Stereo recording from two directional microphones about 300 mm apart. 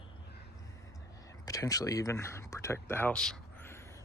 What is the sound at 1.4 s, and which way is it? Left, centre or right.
Speech, centre.